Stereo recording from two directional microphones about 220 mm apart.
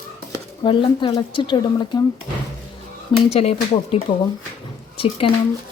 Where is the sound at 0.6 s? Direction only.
20° left (ahead or behind).